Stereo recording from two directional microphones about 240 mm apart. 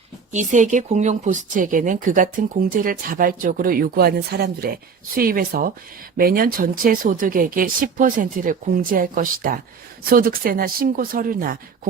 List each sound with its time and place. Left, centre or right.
0.3 s speech: right